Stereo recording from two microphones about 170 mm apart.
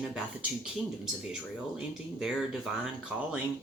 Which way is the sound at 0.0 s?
5° right (ahead or behind).